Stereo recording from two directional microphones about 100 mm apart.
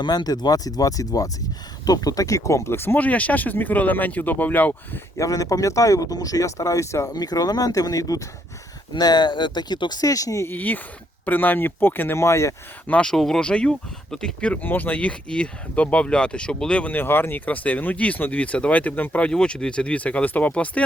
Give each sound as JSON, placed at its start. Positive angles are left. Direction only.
{"t": 0.0, "sound": "speech", "side_deg": 45}
{"t": 5.1, "sound": "speech", "side_deg": 35}
{"t": 10.5, "sound": "speech", "side_deg": 15}
{"t": 12.9, "sound": "speech", "side_deg": 10}